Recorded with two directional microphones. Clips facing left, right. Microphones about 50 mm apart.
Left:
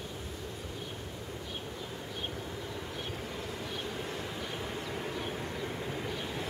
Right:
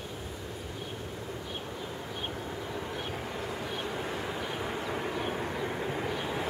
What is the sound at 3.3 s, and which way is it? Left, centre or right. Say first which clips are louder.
Vehicle: right 3 dB; centre.